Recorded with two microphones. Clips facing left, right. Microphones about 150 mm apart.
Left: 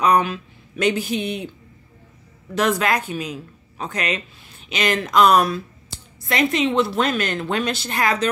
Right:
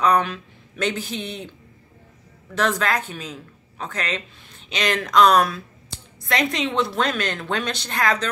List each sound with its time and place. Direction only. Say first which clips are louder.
0.0 s speech: left 2 dB; 10° left (ahead or behind)
2.5 s speech: left 2 dB; 15° left (ahead or behind)